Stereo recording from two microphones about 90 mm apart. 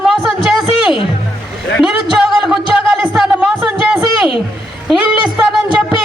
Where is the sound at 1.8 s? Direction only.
10° right (ahead or behind).